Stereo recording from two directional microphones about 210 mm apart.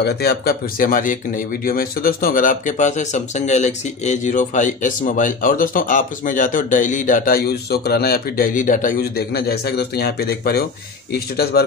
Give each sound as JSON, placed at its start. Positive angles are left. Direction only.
{"t": 0.0, "sound": "speech", "side_deg": 50}